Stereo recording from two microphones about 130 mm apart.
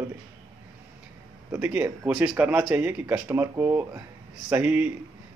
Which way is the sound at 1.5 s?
15° right (ahead or behind).